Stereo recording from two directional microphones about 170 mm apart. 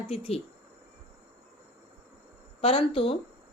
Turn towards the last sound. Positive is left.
turn(degrees=35)  # may be behind; listen again after turning